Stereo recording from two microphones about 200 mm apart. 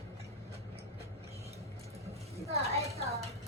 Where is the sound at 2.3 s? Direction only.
30° right (ahead or behind).